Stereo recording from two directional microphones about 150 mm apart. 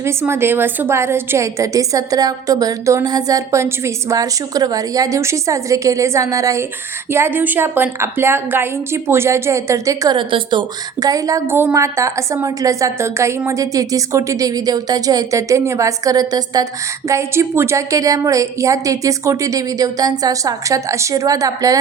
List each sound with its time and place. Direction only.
0.0 s a woman's voice: 15° right (ahead or behind)